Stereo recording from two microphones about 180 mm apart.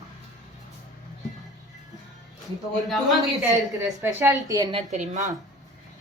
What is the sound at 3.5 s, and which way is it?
A woman's voice, 15° right (ahead or behind).